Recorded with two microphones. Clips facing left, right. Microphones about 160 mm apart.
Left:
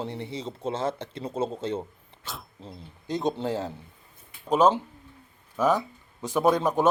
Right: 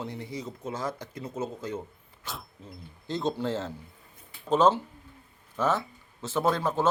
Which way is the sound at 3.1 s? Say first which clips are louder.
Left 2 dB; 15° left (ahead or behind).